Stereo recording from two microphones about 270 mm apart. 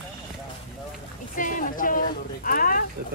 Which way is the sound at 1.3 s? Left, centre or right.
Left.